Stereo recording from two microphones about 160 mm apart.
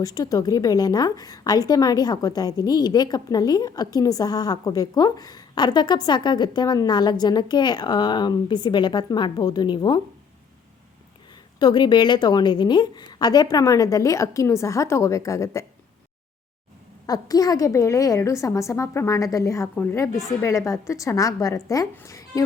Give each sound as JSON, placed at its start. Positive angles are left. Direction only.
{"t": 0.0, "sound": "a woman's voice", "side_deg": 20}
{"t": 11.6, "sound": "a woman's voice", "side_deg": 30}
{"t": 17.1, "sound": "a woman's voice", "side_deg": 25}